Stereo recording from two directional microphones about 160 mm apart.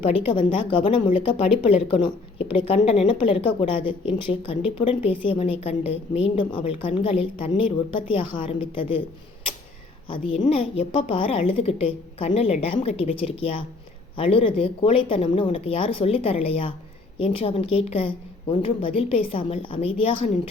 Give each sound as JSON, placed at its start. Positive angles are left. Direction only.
{"t": 0.3, "sound": "a woman's voice", "side_deg": 30}
{"t": 10.1, "sound": "a woman's voice", "side_deg": 35}